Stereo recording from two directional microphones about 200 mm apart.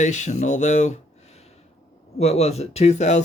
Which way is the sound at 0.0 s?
35° left (ahead or behind).